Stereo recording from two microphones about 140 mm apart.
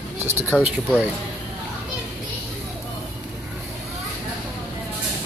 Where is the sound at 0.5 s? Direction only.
5° left (ahead or behind).